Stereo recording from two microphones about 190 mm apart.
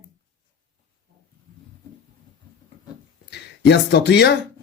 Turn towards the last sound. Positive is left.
turn(degrees=65)  # may be behind; listen again after turning